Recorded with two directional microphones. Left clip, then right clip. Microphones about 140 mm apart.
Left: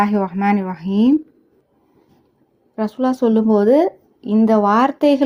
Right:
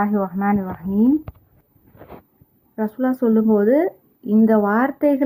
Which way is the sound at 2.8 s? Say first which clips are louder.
Left 3 dB; centre (ahead or behind).